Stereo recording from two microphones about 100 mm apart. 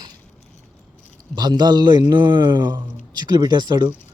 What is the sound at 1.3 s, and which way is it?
Speech, 45° right (ahead or behind).